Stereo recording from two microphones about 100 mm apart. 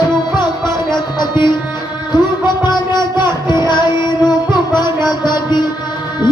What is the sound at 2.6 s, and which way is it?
Music, 45° left (ahead or behind).